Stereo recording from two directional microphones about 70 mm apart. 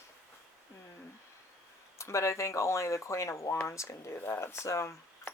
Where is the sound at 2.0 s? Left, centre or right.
Left.